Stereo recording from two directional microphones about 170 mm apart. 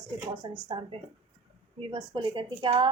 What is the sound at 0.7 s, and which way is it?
A woman's voice, 30° right (ahead or behind).